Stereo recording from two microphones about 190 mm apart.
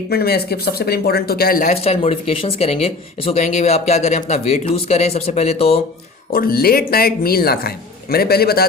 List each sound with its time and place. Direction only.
0.1 s speech: 55° left (ahead or behind)
1.7 s speech: 30° left (ahead or behind)
6.3 s speech: 50° left (ahead or behind)